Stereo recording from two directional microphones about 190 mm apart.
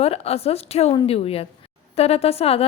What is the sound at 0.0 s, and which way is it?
A woman's voice, 30° left (ahead or behind).